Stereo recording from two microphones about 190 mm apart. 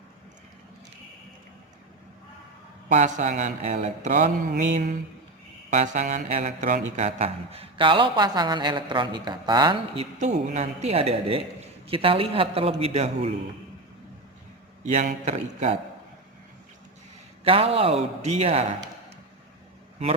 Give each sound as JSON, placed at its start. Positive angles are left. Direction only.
{"t": 2.9, "sound": "a man's voice", "side_deg": -40}
{"t": 14.9, "sound": "speech", "side_deg": -40}
{"t": 17.4, "sound": "speech", "side_deg": -30}